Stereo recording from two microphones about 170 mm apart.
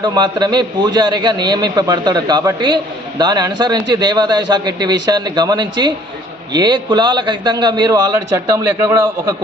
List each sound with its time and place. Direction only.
0.0 s a man's voice: 25° right (ahead or behind)